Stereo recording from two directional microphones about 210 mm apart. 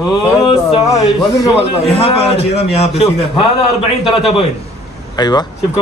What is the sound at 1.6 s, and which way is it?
A man's voice, 25° left (ahead or behind).